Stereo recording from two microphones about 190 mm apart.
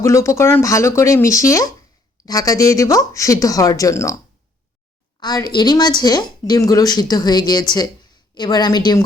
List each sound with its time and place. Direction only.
0.0 s speech: 15° left (ahead or behind)
5.2 s a woman's voice: 20° left (ahead or behind)